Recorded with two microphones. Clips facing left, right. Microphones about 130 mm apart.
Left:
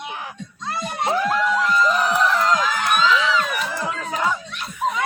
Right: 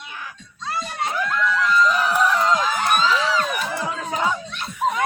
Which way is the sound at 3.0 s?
40° right (ahead or behind).